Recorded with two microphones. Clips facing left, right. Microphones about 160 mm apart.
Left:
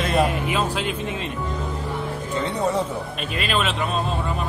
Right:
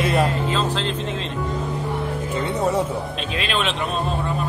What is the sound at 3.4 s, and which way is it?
Speech, 5° left (ahead or behind).